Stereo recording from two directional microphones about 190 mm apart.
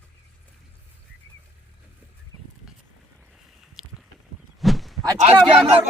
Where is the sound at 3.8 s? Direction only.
Centre (ahead or behind).